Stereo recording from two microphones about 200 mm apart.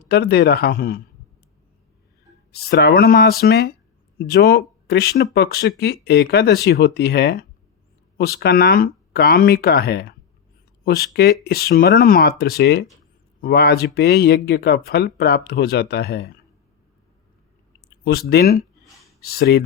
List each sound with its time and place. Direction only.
0.1 s speech: 55° left (ahead or behind)
2.5 s speech: 50° left (ahead or behind)
18.0 s speech: 50° left (ahead or behind)